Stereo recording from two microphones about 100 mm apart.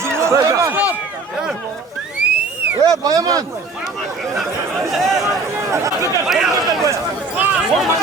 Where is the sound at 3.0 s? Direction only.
40° right (ahead or behind).